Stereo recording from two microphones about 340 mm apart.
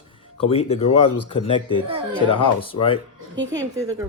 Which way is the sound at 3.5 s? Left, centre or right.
Centre.